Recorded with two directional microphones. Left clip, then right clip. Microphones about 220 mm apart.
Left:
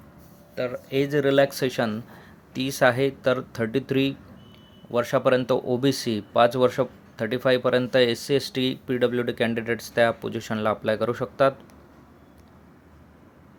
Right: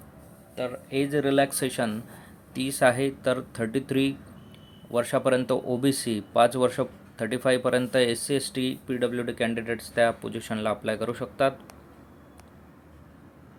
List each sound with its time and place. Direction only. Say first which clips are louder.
0.5 s speech: left 3 dB; 15° left (ahead or behind)